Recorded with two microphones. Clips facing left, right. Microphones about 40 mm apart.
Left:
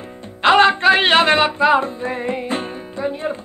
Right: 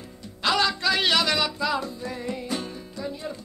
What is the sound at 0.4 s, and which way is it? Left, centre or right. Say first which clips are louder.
Music: left 11 dB; left.